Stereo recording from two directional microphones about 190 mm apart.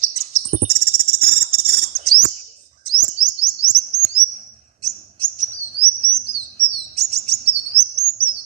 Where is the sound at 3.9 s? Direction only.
35° right (ahead or behind).